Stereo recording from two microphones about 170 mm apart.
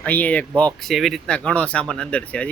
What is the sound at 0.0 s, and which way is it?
Speech, 10° left (ahead or behind).